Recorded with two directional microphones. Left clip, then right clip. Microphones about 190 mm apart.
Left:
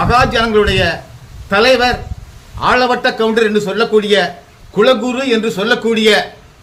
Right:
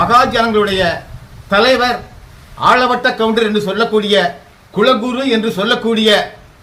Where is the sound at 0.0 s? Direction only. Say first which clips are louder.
Right 1 dB; 10° left (ahead or behind).